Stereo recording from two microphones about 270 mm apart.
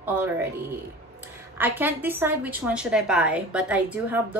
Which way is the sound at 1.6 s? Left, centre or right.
Centre.